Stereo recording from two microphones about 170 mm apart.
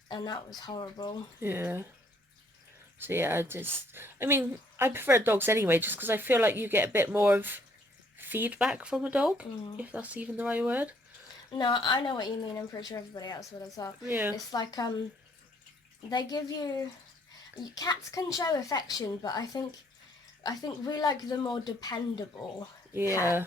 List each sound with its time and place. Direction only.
0.1 s a woman's voice: 25° left (ahead or behind)
1.4 s a woman's voice: 15° right (ahead or behind)
3.0 s a woman's voice: 15° right (ahead or behind)
11.5 s a woman's voice: 25° left (ahead or behind)
14.0 s a woman's voice: 10° right (ahead or behind)
14.3 s a woman's voice: 25° left (ahead or behind)
16.0 s a woman's voice: 25° left (ahead or behind)